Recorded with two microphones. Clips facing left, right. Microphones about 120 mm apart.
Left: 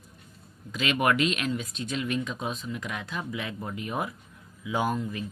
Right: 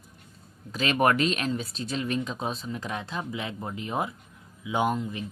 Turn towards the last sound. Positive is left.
turn(degrees=-20)  # may be behind; listen again after turning